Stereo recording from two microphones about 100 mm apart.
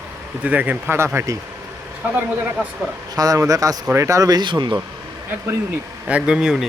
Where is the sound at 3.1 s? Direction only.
40° right (ahead or behind).